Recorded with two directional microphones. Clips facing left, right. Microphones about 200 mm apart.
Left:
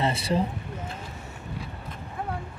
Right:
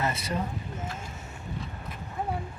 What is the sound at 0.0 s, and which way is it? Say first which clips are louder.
Speech: left 5 dB; 30° left (ahead or behind).